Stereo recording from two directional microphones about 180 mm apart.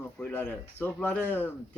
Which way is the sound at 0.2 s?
10° left (ahead or behind).